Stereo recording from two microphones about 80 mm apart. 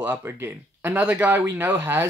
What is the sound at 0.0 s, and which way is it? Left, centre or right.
Speech, right.